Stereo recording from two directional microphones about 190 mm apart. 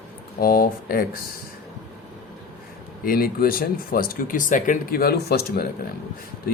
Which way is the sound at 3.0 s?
50° left (ahead or behind).